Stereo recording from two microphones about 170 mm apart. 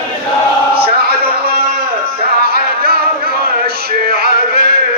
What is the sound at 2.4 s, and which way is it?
Music, 65° right (ahead or behind).